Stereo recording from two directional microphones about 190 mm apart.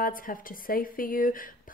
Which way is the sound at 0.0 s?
50° left (ahead or behind).